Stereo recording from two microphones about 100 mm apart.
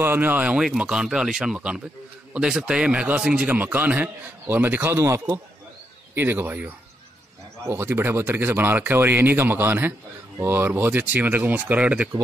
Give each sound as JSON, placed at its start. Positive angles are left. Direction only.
{"t": 0.0, "sound": "a man's voice", "side_deg": -20}
{"t": 6.1, "sound": "a man's voice", "side_deg": -20}